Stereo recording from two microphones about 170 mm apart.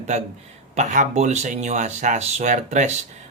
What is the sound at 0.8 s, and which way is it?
A man's voice, 45° right (ahead or behind).